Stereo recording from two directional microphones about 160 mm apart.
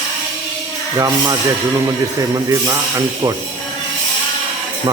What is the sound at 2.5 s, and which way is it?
Speech, 20° right (ahead or behind).